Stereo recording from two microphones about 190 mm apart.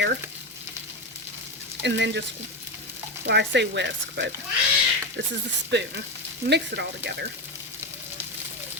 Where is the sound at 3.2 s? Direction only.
65° right (ahead or behind).